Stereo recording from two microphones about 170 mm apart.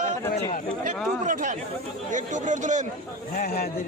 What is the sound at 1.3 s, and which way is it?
Speech, 50° right (ahead or behind).